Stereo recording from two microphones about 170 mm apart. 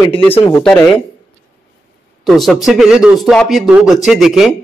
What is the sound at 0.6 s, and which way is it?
Speech, 5° left (ahead or behind).